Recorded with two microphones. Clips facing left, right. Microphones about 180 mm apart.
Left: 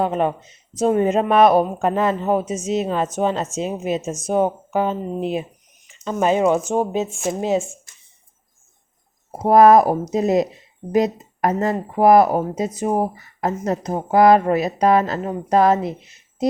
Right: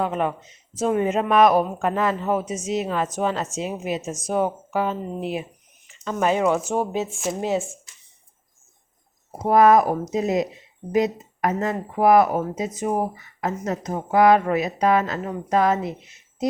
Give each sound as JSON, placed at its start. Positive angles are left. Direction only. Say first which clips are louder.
{"t": 0.0, "sound": "speech", "louder": "left 4 dB", "side_deg": 30}
{"t": 9.5, "sound": "speech", "louder": "left 4 dB", "side_deg": 40}